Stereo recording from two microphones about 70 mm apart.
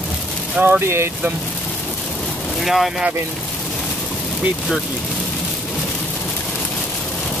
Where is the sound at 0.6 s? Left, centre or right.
Right.